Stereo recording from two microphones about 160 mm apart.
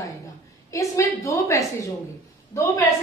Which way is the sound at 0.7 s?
20° left (ahead or behind).